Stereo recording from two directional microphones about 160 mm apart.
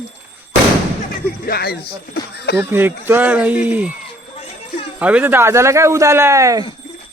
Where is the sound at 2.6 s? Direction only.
15° right (ahead or behind).